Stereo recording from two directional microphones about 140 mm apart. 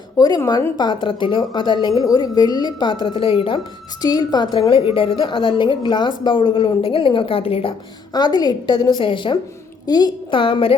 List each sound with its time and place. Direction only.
0.2 s a woman's voice: 30° left (ahead or behind)
8.1 s a woman's voice: 30° left (ahead or behind)